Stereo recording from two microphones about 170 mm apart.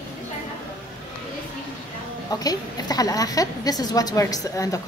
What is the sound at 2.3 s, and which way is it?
A woman's voice, 20° left (ahead or behind).